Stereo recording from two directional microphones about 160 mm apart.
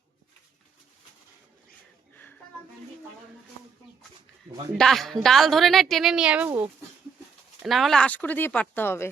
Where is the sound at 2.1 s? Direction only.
10° left (ahead or behind).